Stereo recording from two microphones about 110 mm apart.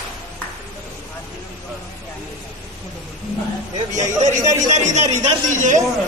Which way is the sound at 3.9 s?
90° right.